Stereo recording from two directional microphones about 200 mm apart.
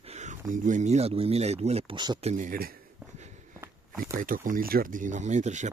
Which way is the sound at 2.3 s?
40° right (ahead or behind).